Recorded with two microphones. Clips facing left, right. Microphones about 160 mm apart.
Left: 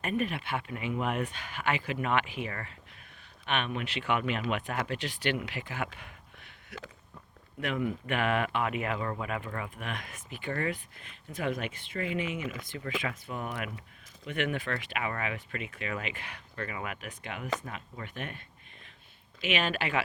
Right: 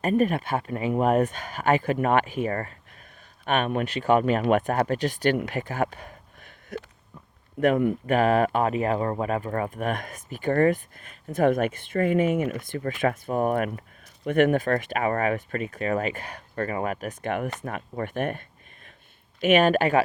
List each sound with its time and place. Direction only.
0.0 s speech: 40° right (ahead or behind)